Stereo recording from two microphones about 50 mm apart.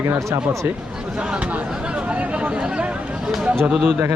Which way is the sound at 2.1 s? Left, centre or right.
Right.